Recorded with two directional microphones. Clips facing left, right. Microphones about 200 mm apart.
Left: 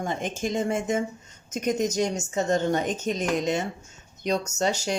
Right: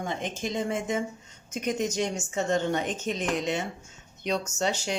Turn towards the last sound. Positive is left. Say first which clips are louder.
# left 3 dB
turn(degrees=40)  # may be behind; listen again after turning